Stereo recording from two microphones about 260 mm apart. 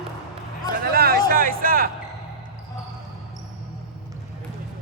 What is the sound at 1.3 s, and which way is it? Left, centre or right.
Music, right.